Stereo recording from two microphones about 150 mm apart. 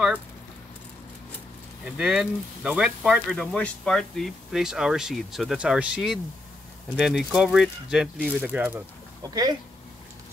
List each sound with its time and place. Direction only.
1.9 s speech: 5° right (ahead or behind)
9.2 s speech: 25° right (ahead or behind)